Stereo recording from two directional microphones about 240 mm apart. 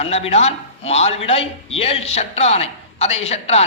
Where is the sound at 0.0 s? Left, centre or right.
Left.